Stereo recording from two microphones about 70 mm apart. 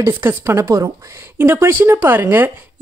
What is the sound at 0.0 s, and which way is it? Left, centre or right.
Speech, right.